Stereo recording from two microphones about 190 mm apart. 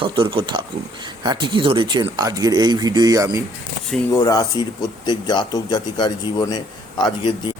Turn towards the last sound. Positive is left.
turn(degrees=25)  # may be behind; listen again after turning